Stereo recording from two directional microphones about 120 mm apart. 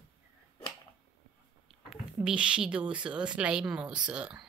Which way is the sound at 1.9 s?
10° right (ahead or behind).